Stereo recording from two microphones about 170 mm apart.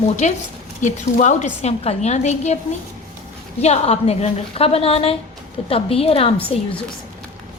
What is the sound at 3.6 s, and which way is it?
A woman's voice, 40° left (ahead or behind).